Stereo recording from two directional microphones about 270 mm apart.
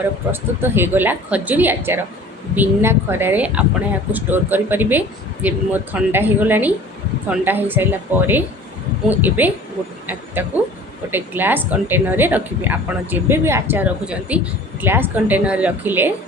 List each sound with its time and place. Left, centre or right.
0.3 s a woman's voice: centre